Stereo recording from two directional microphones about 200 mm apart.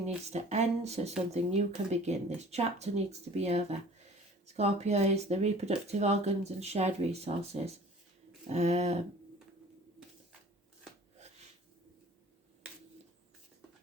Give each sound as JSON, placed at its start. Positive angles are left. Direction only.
{"t": 0.3, "sound": "speech", "side_deg": -35}